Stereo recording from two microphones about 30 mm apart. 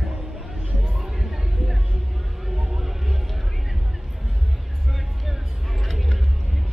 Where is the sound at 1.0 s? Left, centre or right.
Centre.